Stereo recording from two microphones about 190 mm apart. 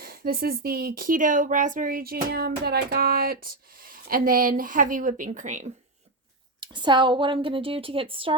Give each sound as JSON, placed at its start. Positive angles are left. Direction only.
{"t": 0.0, "sound": "speech", "side_deg": -50}
{"t": 6.6, "sound": "speech", "side_deg": -25}